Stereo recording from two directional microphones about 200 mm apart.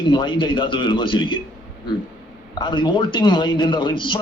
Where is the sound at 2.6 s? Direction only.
25° left (ahead or behind).